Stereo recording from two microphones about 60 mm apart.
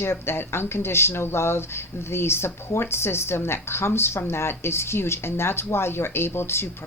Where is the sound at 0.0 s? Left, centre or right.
Left.